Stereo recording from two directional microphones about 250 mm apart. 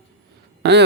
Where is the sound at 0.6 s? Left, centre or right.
Right.